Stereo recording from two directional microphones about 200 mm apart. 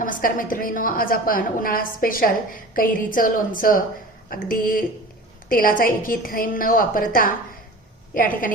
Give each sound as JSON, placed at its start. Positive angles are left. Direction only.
{"t": 0.0, "sound": "a woman's voice", "side_deg": 45}